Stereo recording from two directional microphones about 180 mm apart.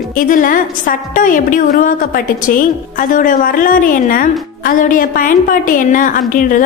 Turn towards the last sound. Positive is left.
turn(degrees=50)  # may be behind; listen again after turning